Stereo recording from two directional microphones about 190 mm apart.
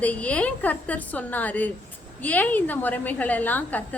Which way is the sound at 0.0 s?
5° left (ahead or behind).